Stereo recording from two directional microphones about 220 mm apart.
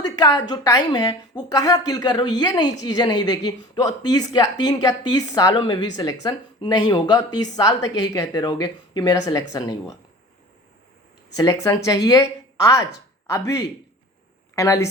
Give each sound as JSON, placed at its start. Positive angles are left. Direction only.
{"t": 0.0, "sound": "a woman's voice", "side_deg": 15}
{"t": 11.3, "sound": "a woman's voice", "side_deg": 15}